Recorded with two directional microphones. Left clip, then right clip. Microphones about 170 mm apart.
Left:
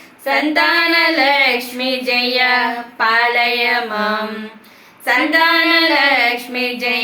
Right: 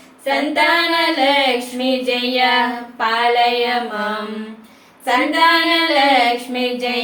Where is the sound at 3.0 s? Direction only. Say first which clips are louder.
Left 1 dB; 15° right (ahead or behind).